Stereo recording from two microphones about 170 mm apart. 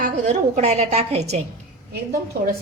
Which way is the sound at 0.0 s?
45° right (ahead or behind).